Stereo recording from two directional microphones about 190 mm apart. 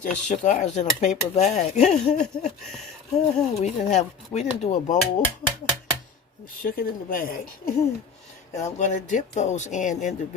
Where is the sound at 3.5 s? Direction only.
35° left (ahead or behind).